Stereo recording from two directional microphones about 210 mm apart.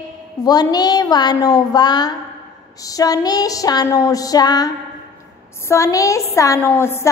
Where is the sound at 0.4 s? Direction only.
20° left (ahead or behind).